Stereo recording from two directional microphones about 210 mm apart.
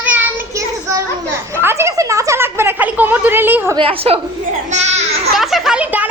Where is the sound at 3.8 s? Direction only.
25° right (ahead or behind).